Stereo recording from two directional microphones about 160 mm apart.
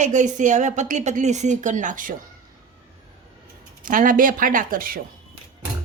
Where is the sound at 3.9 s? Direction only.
60° right (ahead or behind).